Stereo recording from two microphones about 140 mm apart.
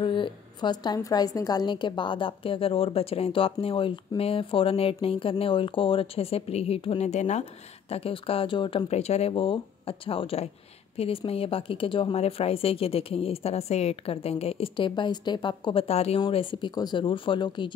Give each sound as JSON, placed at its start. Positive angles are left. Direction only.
{"t": 0.0, "sound": "a woman's voice", "side_deg": 35}